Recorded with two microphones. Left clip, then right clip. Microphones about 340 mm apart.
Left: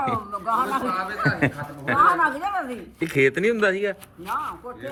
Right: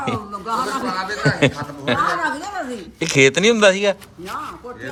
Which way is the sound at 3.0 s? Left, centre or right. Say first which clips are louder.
Right 6 dB; centre.